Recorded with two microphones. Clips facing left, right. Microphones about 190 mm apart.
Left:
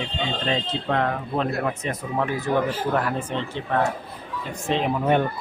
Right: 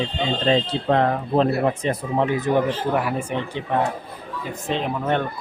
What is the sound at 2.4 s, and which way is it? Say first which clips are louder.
Speech: right 3 dB; 15° right (ahead or behind).